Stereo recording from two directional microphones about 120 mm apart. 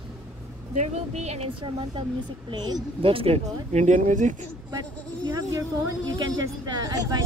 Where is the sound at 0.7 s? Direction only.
70° right (ahead or behind).